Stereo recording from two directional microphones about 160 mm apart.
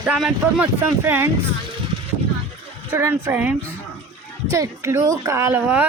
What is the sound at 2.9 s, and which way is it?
A woman's voice, 15° right (ahead or behind).